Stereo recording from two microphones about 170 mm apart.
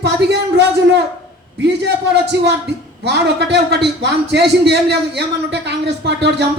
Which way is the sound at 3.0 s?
80° right.